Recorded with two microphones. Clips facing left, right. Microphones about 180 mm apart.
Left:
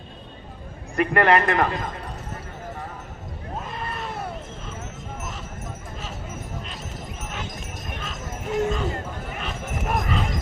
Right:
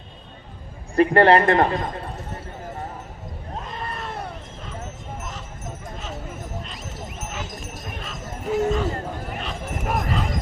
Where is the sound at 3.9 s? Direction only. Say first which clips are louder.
Even; centre (ahead or behind).